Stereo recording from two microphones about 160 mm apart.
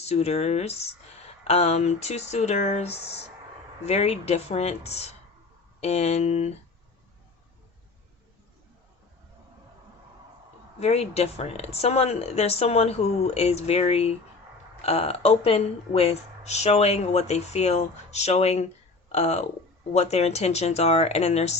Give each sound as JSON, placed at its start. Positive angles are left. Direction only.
{"t": 0.0, "sound": "speech", "side_deg": 40}
{"t": 10.8, "sound": "speech", "side_deg": 40}